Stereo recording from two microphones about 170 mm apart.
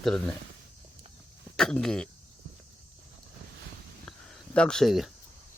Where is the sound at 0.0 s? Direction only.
5° left (ahead or behind).